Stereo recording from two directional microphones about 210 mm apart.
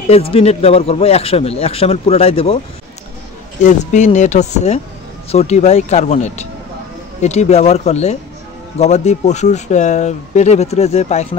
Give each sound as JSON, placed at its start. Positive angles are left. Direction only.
{"t": 0.1, "sound": "speech", "side_deg": 30}
{"t": 3.6, "sound": "speech", "side_deg": 35}